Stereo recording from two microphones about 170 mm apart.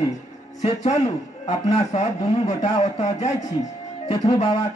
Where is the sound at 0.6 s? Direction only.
40° left (ahead or behind).